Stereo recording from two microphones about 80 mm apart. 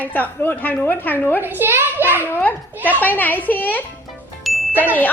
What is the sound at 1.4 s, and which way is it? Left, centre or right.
Speech, right.